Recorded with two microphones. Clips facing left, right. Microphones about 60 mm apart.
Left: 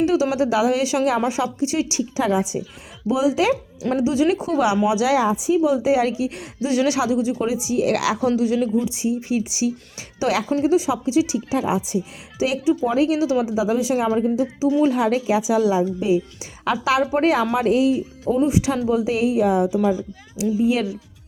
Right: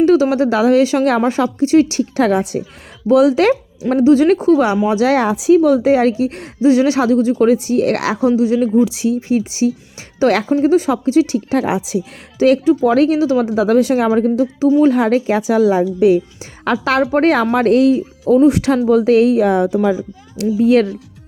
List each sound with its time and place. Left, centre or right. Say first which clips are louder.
0.0 s a woman's voice: right 7 dB; right
3.8 s speech: right 7 dB; right
4.1 s a woman's voice: right 12 dB; right
5.2 s a woman's voice: right 7 dB; right
8.8 s speech: right 8 dB; right
9.3 s a woman's voice: right 6 dB; right
11.8 s a woman's voice: right 4 dB; right
12.4 s a woman's voice: right 8 dB; right
12.8 s speech: right 6 dB; right
13.1 s a woman's voice: right 5 dB; right
16.0 s speech: right 8 dB; right
16.8 s a woman's voice: right 5 dB; right